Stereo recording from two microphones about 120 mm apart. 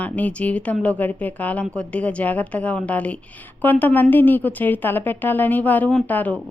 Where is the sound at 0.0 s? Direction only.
10° left (ahead or behind).